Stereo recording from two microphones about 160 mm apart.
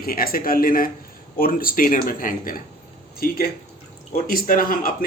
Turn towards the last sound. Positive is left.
turn(degrees=60)  # may be behind; listen again after turning